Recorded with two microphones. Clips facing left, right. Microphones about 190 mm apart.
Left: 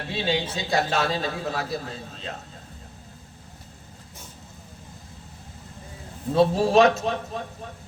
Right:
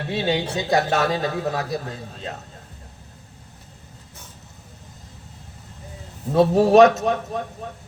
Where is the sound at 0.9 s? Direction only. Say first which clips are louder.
Right 4 dB; 20° right (ahead or behind).